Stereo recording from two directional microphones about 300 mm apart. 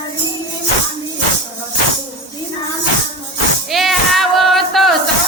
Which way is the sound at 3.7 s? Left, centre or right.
Centre.